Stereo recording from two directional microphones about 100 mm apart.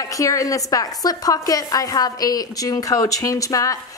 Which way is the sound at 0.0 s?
35° left (ahead or behind).